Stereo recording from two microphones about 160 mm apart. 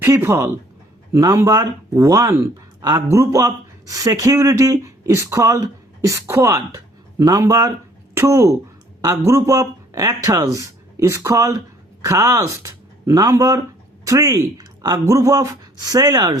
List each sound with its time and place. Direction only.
0.0 s speech: 15° right (ahead or behind)